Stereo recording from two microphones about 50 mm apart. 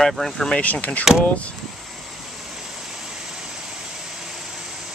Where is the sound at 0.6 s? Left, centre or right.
Left.